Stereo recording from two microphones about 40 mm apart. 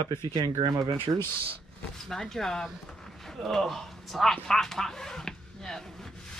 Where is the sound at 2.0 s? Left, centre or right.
Centre.